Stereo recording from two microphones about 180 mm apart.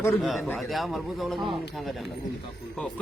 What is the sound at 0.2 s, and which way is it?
Speech, centre (ahead or behind).